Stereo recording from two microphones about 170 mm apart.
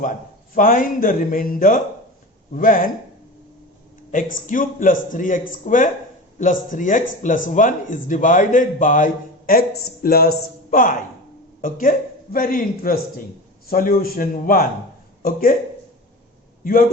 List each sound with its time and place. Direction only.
0.5 s a man's voice: 50° left (ahead or behind)
4.1 s a man's voice: 50° left (ahead or behind)
9.5 s speech: 60° left (ahead or behind)
16.6 s speech: 60° left (ahead or behind)